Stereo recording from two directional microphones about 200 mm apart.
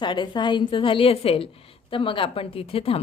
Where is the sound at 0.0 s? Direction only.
25° left (ahead or behind).